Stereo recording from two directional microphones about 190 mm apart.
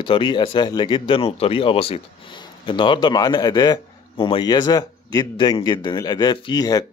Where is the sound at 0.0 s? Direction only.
25° left (ahead or behind).